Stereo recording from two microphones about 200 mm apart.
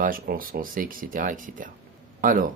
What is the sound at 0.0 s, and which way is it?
Speech, 45° right (ahead or behind).